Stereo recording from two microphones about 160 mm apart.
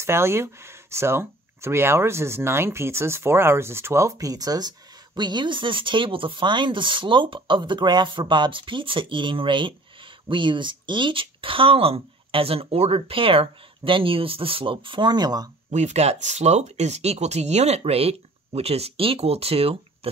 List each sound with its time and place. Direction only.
0.0 s speech: 15° right (ahead or behind)
15.7 s speech: 45° right (ahead or behind)